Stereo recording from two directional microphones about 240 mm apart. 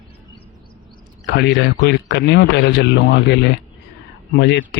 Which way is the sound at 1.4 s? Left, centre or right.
Left.